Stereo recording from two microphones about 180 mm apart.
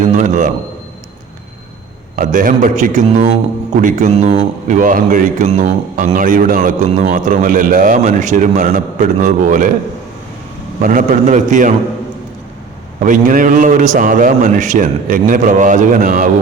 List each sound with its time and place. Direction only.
0.1 s a man's voice: 45° right (ahead or behind)
2.1 s a man's voice: 50° right (ahead or behind)
10.8 s a man's voice: 45° right (ahead or behind)
13.0 s a man's voice: 45° right (ahead or behind)